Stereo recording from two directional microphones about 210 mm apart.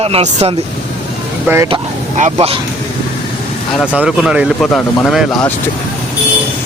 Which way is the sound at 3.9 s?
5° right (ahead or behind).